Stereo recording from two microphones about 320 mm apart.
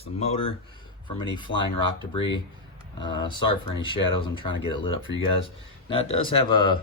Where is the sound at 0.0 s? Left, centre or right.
Centre.